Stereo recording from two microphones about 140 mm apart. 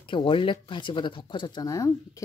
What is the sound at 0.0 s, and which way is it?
Speech, 35° left (ahead or behind).